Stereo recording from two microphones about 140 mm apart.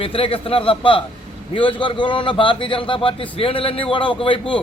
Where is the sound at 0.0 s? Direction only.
40° left (ahead or behind).